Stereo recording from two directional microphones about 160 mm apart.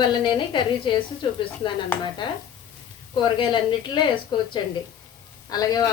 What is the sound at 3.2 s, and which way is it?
A woman's voice, 30° left (ahead or behind).